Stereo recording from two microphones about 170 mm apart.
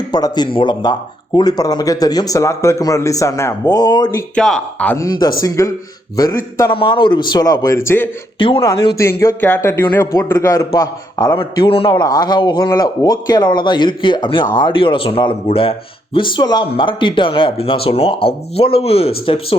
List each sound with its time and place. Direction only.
0.1 s speech: 25° left (ahead or behind)
4.4 s speech: 5° left (ahead or behind)
4.9 s speech: 20° left (ahead or behind)
8.4 s speech: 30° left (ahead or behind)
9.0 s speech: 15° left (ahead or behind); by 19.5 s 30° left (ahead or behind)